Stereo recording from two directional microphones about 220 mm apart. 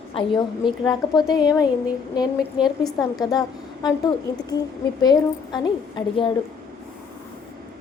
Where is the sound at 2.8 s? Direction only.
15° left (ahead or behind).